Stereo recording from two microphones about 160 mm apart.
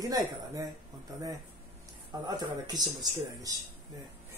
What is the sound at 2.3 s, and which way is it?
Speech, 25° right (ahead or behind).